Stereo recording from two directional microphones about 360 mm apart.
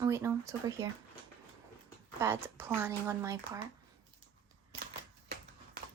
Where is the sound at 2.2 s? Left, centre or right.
Centre.